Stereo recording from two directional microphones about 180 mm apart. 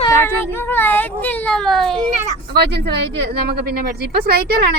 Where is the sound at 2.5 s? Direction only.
65° right (ahead or behind).